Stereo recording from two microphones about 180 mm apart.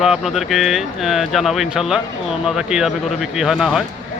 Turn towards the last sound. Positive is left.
turn(degrees=0)  # may be behind; listen again after turning